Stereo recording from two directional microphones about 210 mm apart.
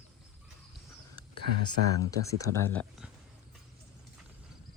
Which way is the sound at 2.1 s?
15° left (ahead or behind).